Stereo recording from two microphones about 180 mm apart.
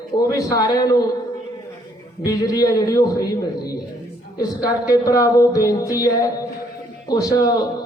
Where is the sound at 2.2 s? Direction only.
20° left (ahead or behind).